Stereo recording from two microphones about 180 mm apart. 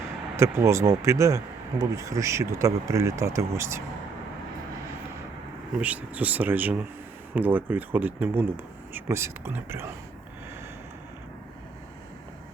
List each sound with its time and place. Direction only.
0.3 s speech: 15° right (ahead or behind)
5.8 s speech: 10° right (ahead or behind)